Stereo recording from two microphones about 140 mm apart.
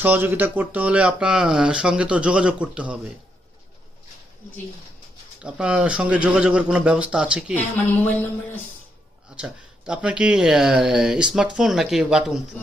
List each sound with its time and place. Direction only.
0.0 s speech: 15° right (ahead or behind)
5.4 s speech: 5° right (ahead or behind)
8.0 s speech: 10° left (ahead or behind)
9.3 s speech: 5° right (ahead or behind)